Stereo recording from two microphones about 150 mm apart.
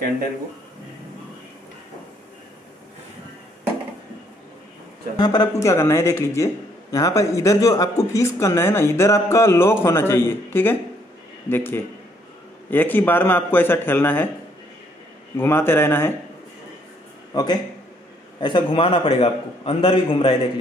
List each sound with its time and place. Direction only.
5.1 s a man's voice: 25° left (ahead or behind)
15.3 s a man's voice: 15° left (ahead or behind)
17.3 s a man's voice: 25° left (ahead or behind)